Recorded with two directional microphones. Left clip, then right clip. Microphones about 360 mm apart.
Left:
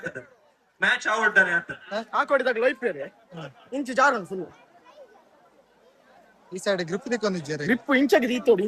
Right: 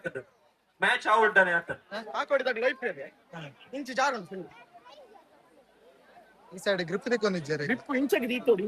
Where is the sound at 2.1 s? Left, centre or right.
Left.